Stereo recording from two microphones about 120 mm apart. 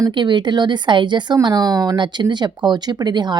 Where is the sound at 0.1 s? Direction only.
40° right (ahead or behind).